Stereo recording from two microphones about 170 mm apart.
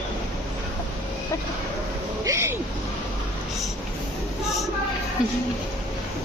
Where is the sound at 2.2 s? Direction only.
15° right (ahead or behind).